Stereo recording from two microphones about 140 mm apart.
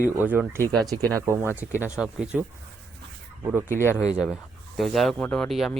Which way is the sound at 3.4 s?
15° right (ahead or behind).